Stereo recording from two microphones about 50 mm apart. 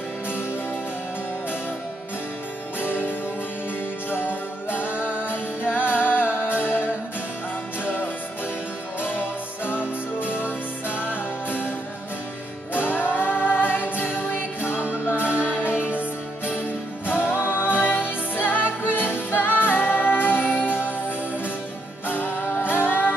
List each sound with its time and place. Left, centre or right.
2.8 s music: left
9.7 s music: left
12.7 s music: left
17.0 s music: left
22.0 s music: left